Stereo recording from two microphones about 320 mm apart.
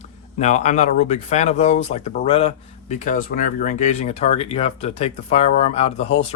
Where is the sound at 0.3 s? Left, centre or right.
Left.